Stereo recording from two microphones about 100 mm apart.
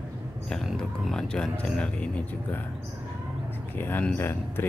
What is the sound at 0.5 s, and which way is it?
Speech, 5° left (ahead or behind).